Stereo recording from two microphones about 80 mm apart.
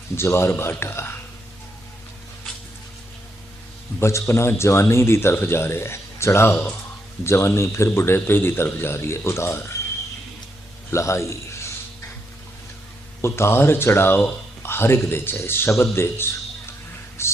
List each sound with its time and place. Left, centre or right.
0.2 s speech: left
4.0 s speech: left
10.9 s a man's voice: left
13.2 s speech: left
17.2 s a sound: left